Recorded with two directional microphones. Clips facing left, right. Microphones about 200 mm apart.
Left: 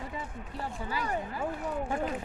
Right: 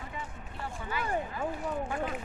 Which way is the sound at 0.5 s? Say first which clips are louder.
Left 1 dB; 35° left (ahead or behind).